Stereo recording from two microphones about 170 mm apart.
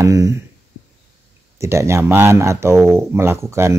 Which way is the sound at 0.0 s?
20° right (ahead or behind).